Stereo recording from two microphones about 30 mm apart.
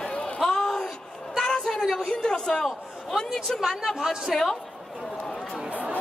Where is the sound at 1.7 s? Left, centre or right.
Centre.